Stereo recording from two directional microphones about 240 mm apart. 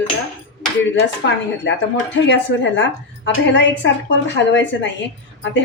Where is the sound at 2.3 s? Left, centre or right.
Left.